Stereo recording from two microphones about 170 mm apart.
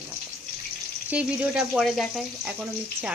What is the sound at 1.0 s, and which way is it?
Speech, 5° right (ahead or behind).